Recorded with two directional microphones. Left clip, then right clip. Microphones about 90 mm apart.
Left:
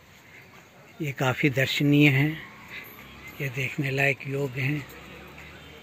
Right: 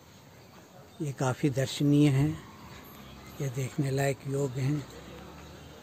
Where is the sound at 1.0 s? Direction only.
35° left (ahead or behind).